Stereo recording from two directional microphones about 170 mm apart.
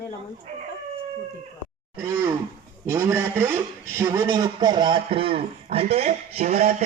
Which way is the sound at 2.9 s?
15° right (ahead or behind).